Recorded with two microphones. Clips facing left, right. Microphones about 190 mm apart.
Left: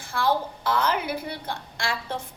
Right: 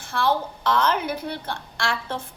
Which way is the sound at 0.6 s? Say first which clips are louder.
Right 5 dB; 10° left (ahead or behind).